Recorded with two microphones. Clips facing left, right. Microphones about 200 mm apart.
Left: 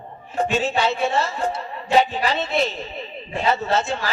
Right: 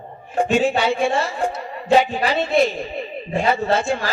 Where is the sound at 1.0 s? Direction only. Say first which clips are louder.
Right 2 dB; 10° right (ahead or behind).